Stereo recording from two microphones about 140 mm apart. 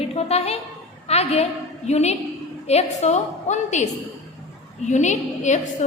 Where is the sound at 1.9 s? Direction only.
50° left (ahead or behind).